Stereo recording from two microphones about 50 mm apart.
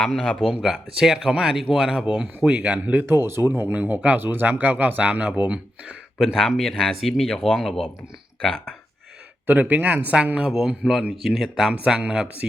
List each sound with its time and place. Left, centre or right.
0.0 s speech: centre
0.4 s speech: centre
2.6 s speech: right
3.0 s speech: right
3.4 s speech: right
4.2 s speech: right
6.1 s speech: centre
7.0 s speech: centre
7.3 s speech: centre
9.5 s speech: right
11.2 s speech: centre; by 12.5 s right